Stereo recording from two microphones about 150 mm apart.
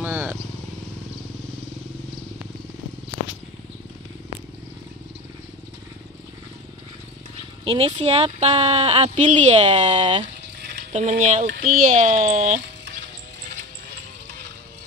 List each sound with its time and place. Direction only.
0.0 s wild animals: 15° right (ahead or behind)
7.6 s speech: 40° right (ahead or behind)
10.9 s speech: 50° right (ahead or behind)
11.4 s a child's voice: 65° right (ahead or behind)